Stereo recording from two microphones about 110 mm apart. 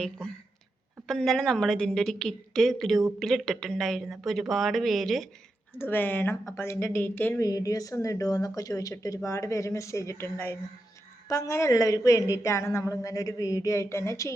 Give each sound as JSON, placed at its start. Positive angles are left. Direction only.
{"t": 1.0, "sound": "speech", "side_deg": 5}
{"t": 5.8, "sound": "speech", "side_deg": 20}
{"t": 7.3, "sound": "speech", "side_deg": 35}